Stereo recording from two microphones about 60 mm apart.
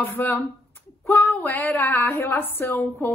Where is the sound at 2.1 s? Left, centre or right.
Left.